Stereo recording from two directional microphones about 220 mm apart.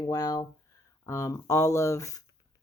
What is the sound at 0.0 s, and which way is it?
Speech, 15° left (ahead or behind).